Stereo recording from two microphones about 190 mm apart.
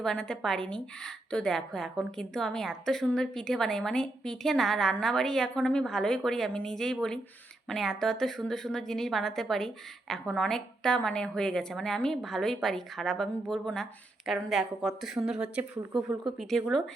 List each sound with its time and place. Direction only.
0.0 s a woman's voice: 5° left (ahead or behind)